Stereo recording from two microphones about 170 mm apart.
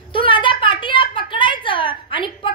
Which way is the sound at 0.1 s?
30° left (ahead or behind).